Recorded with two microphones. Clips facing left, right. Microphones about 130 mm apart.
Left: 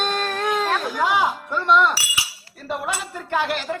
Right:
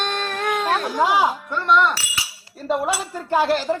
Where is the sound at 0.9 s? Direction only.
30° right (ahead or behind).